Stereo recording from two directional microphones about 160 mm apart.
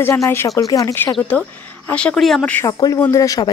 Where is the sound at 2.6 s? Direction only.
20° left (ahead or behind).